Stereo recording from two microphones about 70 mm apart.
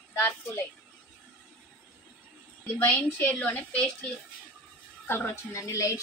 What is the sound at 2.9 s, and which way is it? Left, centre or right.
A woman's voice, left.